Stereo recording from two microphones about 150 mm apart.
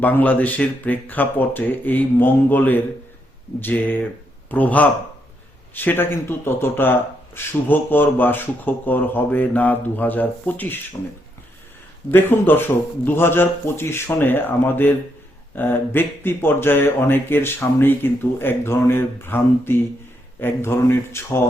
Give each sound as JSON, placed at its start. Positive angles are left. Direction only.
{"t": 0.0, "sound": "a man's voice", "side_deg": 10}
{"t": 12.1, "sound": "speech", "side_deg": 15}